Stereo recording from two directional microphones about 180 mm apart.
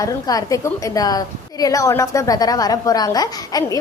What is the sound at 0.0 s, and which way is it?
A woman's voice, 20° left (ahead or behind).